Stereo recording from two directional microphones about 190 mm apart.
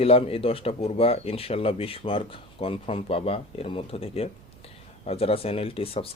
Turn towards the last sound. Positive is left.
turn(degrees=30)  # may be behind; listen again after turning